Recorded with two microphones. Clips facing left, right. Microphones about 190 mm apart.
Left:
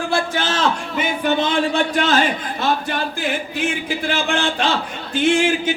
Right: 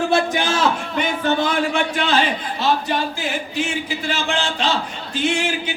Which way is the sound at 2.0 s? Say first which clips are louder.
Left 2 dB; 45° left (ahead or behind).